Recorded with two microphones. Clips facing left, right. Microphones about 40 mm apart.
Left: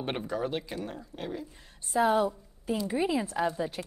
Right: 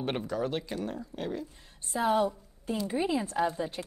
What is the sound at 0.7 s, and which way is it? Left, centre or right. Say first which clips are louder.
Speech: right 2 dB; centre.